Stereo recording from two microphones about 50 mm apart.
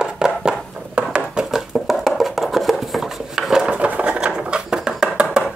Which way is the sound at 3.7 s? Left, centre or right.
Right.